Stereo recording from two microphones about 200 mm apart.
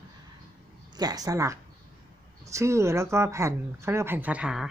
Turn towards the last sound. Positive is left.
turn(degrees=-5)  # may be behind; listen again after turning